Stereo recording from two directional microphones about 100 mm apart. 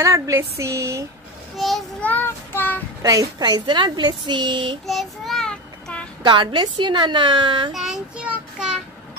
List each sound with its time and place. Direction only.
0.0 s a sound: 30° right (ahead or behind)
1.6 s a child's voice: centre (ahead or behind)
2.0 s child singing: 15° left (ahead or behind)
3.0 s a woman's voice: 40° right (ahead or behind)
4.8 s child singing: centre (ahead or behind)
6.2 s a woman's voice: 50° right (ahead or behind)
7.7 s child singing: 5° right (ahead or behind)